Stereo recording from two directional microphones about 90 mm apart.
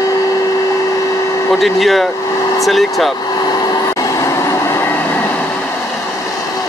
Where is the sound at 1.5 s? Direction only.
Centre (ahead or behind).